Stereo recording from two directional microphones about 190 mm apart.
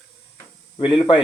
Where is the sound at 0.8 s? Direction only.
25° left (ahead or behind).